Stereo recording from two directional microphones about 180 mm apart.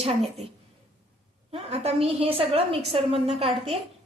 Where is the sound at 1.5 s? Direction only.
35° right (ahead or behind).